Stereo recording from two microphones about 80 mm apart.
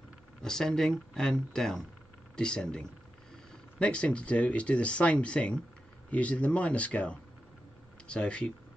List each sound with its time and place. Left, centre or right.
0.4 s speech: centre
3.8 s speech: centre